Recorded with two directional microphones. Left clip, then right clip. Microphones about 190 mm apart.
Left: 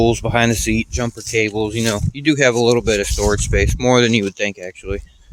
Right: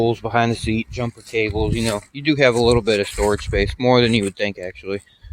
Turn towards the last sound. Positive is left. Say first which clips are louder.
# even
turn(degrees=10)  # may be behind; listen again after turning